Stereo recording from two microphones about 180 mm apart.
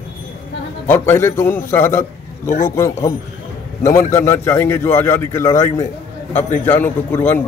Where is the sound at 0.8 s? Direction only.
10° left (ahead or behind).